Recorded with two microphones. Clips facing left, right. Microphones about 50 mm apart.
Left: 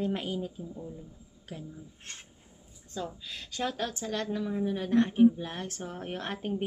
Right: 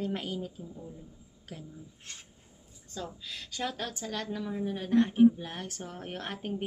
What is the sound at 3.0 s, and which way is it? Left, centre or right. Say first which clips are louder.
A woman's voice: left 2 dB; centre.